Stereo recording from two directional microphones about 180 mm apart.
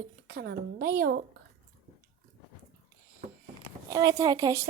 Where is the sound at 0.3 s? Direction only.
60° right (ahead or behind).